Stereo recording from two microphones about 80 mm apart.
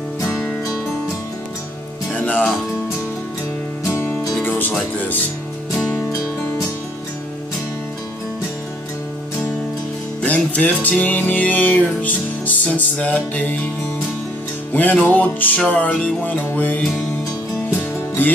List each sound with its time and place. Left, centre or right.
2.1 s music: centre
3.9 s music: left
4.9 s speech: left
10.2 s music: centre
14.7 s music: left